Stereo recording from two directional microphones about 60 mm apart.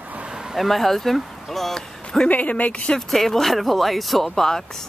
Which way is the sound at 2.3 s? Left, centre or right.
Left.